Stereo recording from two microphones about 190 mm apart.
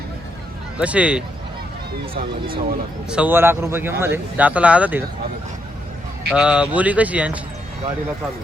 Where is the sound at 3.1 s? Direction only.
10° right (ahead or behind).